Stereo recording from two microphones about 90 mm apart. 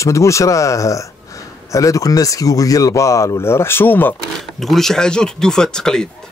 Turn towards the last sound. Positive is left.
turn(degrees=10)  # may be behind; listen again after turning